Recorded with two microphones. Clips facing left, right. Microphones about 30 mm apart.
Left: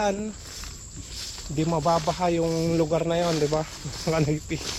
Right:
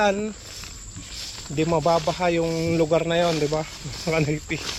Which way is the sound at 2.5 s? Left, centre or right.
Centre.